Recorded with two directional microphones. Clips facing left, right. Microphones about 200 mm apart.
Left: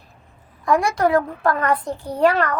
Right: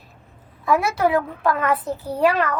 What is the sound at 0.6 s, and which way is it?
A child's voice, 5° right (ahead or behind).